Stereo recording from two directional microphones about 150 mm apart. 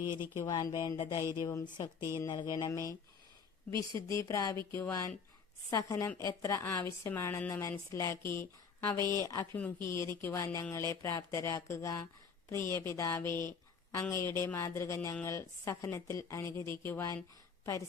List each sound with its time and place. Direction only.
0.3 s a woman's voice: 25° left (ahead or behind)